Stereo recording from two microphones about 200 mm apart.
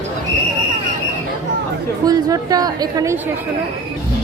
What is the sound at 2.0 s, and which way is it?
A woman's voice, 20° right (ahead or behind).